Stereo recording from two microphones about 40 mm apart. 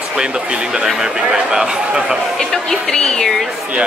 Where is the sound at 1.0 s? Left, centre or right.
Centre.